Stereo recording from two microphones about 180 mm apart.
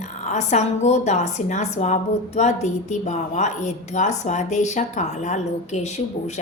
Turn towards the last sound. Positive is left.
turn(degrees=40)  # may be behind; listen again after turning